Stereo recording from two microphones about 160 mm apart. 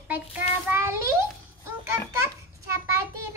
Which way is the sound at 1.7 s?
15° right (ahead or behind).